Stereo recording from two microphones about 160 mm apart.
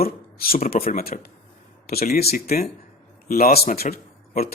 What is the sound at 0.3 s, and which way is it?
Speech, 65° left (ahead or behind).